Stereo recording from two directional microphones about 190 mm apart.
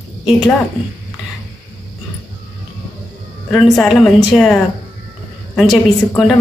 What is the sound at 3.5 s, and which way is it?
A woman's voice, centre (ahead or behind).